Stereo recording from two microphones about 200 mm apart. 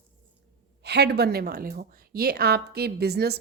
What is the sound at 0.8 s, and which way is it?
A woman's voice, 55° right (ahead or behind).